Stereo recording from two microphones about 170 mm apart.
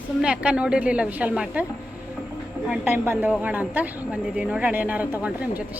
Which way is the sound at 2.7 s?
10° right (ahead or behind).